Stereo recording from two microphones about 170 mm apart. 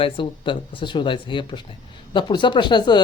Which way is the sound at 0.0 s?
30° left (ahead or behind).